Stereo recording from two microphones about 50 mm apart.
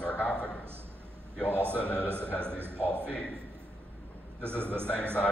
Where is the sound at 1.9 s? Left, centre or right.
Right.